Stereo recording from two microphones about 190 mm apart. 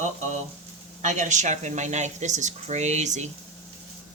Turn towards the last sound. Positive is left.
turn(degrees=-40)  # may be behind; listen again after turning